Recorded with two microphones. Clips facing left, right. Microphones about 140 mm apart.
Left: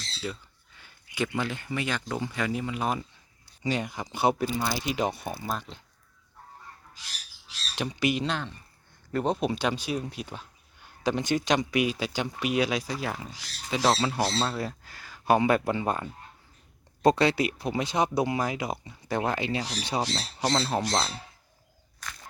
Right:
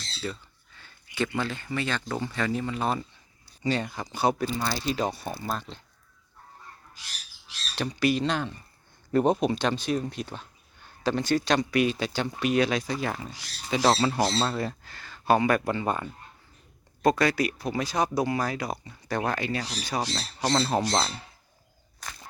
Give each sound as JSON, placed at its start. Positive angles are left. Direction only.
{"t": 0.2, "sound": "speech", "side_deg": 5}
{"t": 0.8, "sound": "a sound", "side_deg": 15}
{"t": 1.4, "sound": "speech", "side_deg": 15}
{"t": 7.8, "sound": "speech", "side_deg": 20}
{"t": 8.3, "sound": "speech", "side_deg": -5}
{"t": 9.4, "sound": "speech", "side_deg": 5}
{"t": 15.6, "sound": "speech", "side_deg": 10}
{"t": 17.0, "sound": "speech", "side_deg": 30}
{"t": 19.9, "sound": "speech", "side_deg": 10}